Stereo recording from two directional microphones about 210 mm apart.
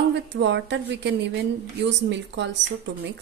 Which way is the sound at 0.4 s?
55° right (ahead or behind).